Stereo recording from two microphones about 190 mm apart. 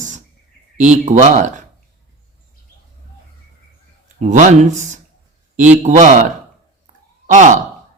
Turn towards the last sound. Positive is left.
turn(degrees=-40)  # may be behind; listen again after turning